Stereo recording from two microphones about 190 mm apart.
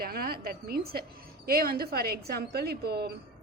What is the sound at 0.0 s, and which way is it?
A woman's voice, 50° right (ahead or behind).